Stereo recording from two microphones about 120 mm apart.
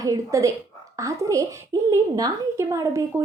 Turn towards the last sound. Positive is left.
turn(degrees=-25)  # may be behind; listen again after turning